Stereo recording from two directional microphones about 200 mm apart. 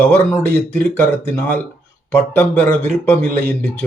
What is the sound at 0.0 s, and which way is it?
Speech, 10° left (ahead or behind).